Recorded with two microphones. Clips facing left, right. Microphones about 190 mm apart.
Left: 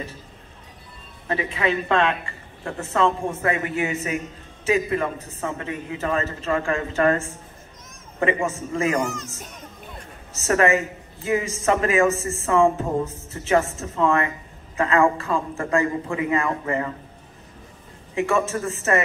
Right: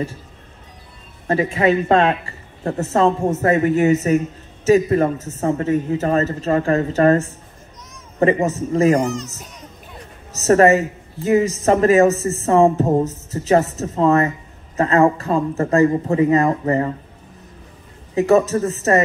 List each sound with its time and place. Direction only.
1.2 s speech: 45° right (ahead or behind)
10.3 s speech: 40° right (ahead or behind)
18.1 s speech: 40° right (ahead or behind)